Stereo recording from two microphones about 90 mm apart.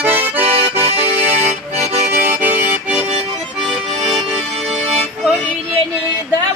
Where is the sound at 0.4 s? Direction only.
90° right.